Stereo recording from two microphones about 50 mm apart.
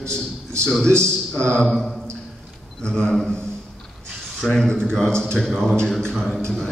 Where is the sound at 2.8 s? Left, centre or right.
Centre.